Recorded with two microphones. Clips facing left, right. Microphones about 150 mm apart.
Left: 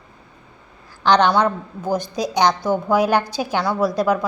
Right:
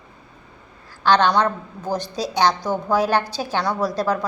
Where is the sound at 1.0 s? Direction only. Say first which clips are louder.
Left 1 dB; 15° left (ahead or behind).